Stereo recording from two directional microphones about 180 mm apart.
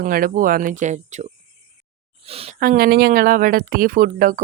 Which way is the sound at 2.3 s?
35° right (ahead or behind).